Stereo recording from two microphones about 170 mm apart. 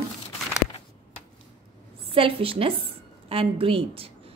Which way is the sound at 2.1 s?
35° right (ahead or behind).